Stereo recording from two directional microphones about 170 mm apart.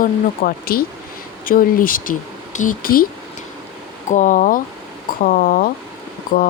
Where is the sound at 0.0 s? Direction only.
60° left (ahead or behind).